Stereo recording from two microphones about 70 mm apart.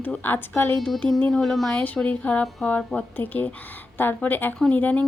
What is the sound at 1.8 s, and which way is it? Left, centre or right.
Speech, centre.